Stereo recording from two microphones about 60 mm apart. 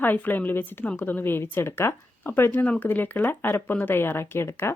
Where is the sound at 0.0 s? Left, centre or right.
Left.